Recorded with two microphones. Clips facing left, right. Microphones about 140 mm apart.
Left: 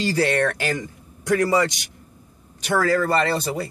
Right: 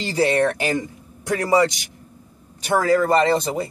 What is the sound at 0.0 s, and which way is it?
Speech, 20° right (ahead or behind).